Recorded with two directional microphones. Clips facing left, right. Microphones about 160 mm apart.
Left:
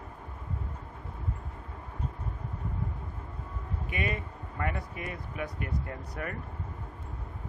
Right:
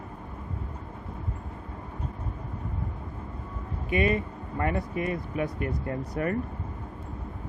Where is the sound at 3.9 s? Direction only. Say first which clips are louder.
Right 10 dB; 30° right (ahead or behind).